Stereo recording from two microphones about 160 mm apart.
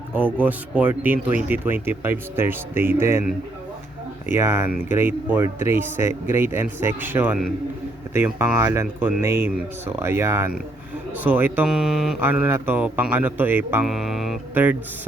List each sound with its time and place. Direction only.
0.1 s speech: 10° right (ahead or behind)
4.4 s speech: 15° right (ahead or behind)
13.8 s music: centre (ahead or behind)
14.5 s speech: 10° right (ahead or behind)